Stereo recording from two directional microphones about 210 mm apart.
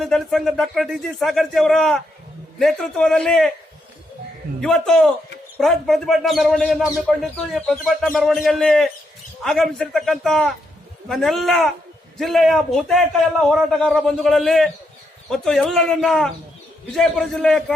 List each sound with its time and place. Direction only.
0.0 s speech: centre (ahead or behind)
4.6 s speech: centre (ahead or behind)